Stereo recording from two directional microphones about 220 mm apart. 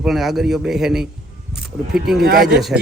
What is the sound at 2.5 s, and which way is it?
Speech, centre (ahead or behind).